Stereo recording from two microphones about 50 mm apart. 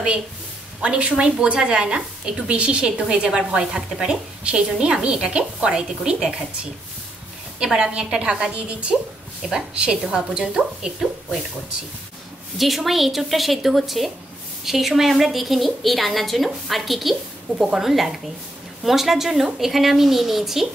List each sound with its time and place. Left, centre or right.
0.8 s a woman's voice: right
4.4 s a woman's voice: right
7.6 s a woman's voice: centre
12.5 s a woman's voice: centre